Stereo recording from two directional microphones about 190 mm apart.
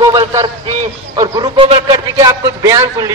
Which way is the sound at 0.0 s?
20° right (ahead or behind).